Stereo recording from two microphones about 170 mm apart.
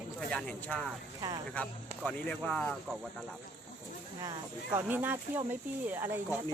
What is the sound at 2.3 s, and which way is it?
Speech, 5° left (ahead or behind).